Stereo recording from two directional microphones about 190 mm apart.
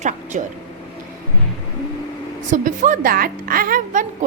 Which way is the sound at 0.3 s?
40° right (ahead or behind).